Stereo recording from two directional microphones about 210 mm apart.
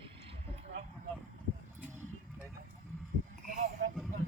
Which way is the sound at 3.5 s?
40° right (ahead or behind).